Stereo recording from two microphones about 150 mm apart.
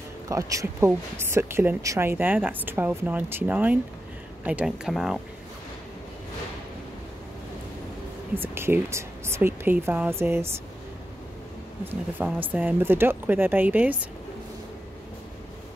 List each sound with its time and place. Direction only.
0.3 s speech: 20° right (ahead or behind); by 5.2 s 5° right (ahead or behind)
8.4 s speech: 15° right (ahead or behind)
11.8 s speech: 15° right (ahead or behind)